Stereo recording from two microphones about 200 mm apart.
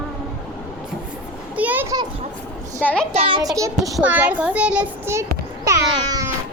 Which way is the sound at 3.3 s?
20° right (ahead or behind).